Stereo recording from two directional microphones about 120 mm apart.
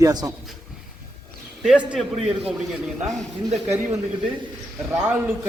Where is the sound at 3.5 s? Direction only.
65° right (ahead or behind).